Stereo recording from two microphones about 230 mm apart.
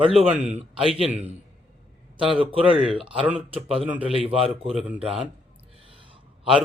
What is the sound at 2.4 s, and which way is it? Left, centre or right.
Speech, right.